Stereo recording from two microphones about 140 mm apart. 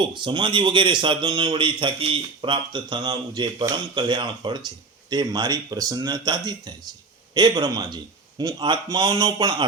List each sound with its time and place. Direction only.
0.0 s a man's voice: 35° right (ahead or behind)